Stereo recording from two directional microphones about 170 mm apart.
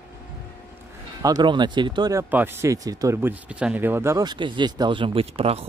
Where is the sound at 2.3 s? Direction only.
15° right (ahead or behind); by 5.6 s 35° right (ahead or behind).